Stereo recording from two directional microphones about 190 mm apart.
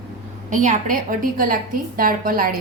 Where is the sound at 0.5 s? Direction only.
40° right (ahead or behind).